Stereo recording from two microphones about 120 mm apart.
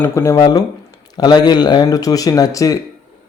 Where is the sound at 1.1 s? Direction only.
35° left (ahead or behind).